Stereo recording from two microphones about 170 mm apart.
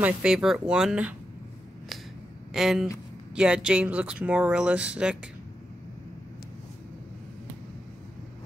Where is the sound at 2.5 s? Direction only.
Centre (ahead or behind).